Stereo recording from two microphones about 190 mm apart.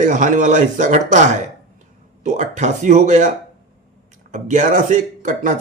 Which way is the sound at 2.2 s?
40° right (ahead or behind).